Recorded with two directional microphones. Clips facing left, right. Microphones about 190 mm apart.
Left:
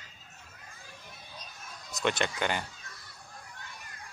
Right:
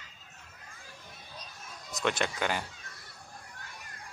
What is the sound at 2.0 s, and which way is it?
Speech, 5° right (ahead or behind).